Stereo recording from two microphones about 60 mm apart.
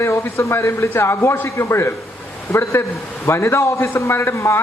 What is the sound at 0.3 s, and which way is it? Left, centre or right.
A man's voice, left.